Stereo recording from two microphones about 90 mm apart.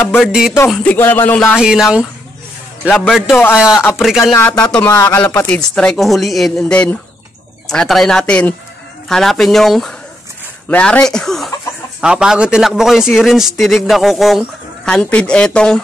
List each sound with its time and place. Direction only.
0.2 s a man's voice: 5° right (ahead or behind)
0.8 s music: 20° left (ahead or behind)
1.6 s a man's voice: 10° right (ahead or behind)
3.3 s music: 25° left (ahead or behind)
3.5 s a man's voice: 10° right (ahead or behind)
4.2 s a sound: 30° left (ahead or behind)
4.8 s music: 25° left (ahead or behind)
5.5 s speech: 10° left (ahead or behind)
6.7 s speech: 10° left (ahead or behind)
12.0 s a man's voice: 10° right (ahead or behind)
14.9 s speech: 10° left (ahead or behind)